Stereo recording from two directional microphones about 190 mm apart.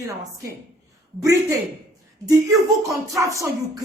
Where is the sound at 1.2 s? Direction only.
15° right (ahead or behind).